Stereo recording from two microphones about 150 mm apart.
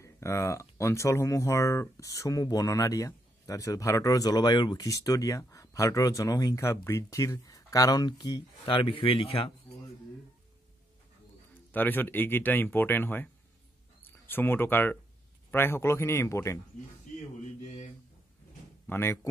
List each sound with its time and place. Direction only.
0.0 s speech: 20° left (ahead or behind)
8.6 s speech: 35° left (ahead or behind)
11.7 s speech: 10° left (ahead or behind)
18.9 s speech: 15° left (ahead or behind)